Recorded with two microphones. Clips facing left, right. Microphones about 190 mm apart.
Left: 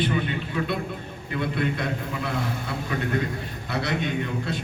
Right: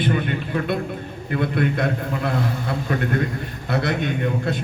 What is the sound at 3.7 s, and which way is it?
Speech, 50° right (ahead or behind).